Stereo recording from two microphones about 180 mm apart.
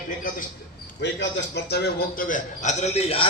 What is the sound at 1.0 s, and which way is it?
Speech, 75° left (ahead or behind).